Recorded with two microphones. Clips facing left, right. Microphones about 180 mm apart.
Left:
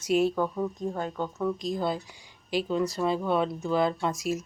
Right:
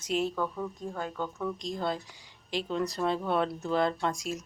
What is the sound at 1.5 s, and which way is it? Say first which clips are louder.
Speech: left 3 dB; 5° left (ahead or behind).